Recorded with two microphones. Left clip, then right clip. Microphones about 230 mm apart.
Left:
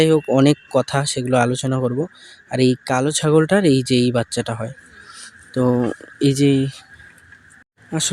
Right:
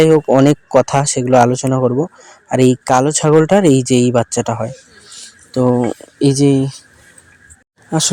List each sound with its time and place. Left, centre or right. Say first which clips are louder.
0.0 s a man's voice: right 5 dB; centre
7.9 s speech: right 6 dB; centre